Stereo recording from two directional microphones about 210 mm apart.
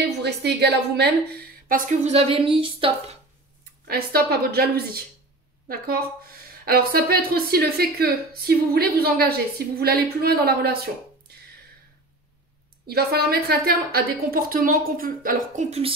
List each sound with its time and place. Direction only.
0.2 s a woman's voice: 50° right (ahead or behind)
1.7 s a woman's voice: 35° right (ahead or behind)
3.8 s a woman's voice: 45° right (ahead or behind)
12.8 s a woman's voice: 50° right (ahead or behind)